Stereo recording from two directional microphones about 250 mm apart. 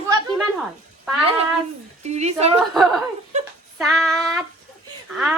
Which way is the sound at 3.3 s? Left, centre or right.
Right.